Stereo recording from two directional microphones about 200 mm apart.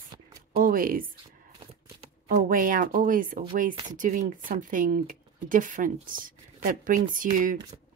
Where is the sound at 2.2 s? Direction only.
40° right (ahead or behind).